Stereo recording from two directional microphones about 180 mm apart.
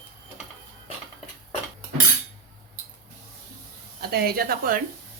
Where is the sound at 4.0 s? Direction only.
60° right (ahead or behind).